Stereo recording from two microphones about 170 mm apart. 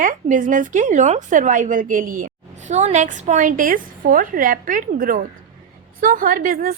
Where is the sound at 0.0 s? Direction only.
50° right (ahead or behind).